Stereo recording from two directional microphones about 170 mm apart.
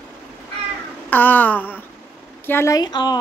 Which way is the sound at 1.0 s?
10° left (ahead or behind).